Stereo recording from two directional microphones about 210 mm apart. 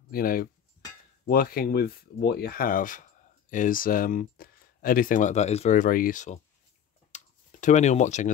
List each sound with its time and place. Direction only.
0.1 s cutlery: 45° left (ahead or behind)
1.2 s speech: 45° left (ahead or behind)
7.1 s a sound: 35° left (ahead or behind)